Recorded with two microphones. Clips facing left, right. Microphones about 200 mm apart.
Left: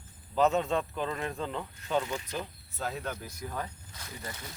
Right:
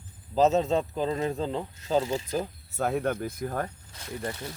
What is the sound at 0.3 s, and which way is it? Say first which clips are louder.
Speech: right 4 dB; 25° right (ahead or behind).